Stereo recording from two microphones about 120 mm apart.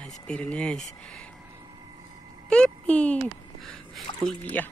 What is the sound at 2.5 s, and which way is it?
Speech, 10° left (ahead or behind).